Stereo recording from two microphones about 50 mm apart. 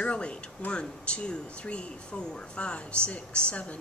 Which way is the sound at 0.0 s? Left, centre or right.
Left.